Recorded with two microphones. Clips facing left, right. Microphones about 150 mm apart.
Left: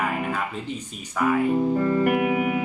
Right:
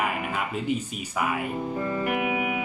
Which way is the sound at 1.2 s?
10° right (ahead or behind).